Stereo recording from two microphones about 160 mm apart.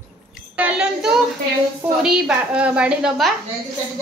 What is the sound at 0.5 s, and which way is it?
A woman's voice, 5° right (ahead or behind).